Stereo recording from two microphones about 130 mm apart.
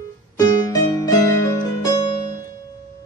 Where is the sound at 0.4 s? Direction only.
30° left (ahead or behind).